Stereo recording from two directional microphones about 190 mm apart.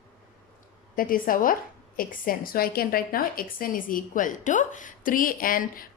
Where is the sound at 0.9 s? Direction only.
45° left (ahead or behind).